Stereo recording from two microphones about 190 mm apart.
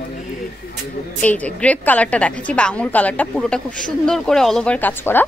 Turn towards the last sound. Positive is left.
turn(degrees=10)  # may be behind; listen again after turning